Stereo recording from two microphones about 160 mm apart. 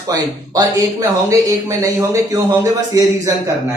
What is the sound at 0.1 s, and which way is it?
Speech, 20° right (ahead or behind).